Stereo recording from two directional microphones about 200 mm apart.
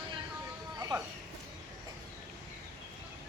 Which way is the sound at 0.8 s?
15° right (ahead or behind).